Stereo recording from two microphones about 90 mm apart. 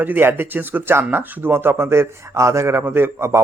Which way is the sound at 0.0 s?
20° right (ahead or behind).